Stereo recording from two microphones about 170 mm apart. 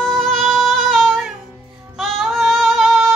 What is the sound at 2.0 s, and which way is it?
Female singing, centre (ahead or behind).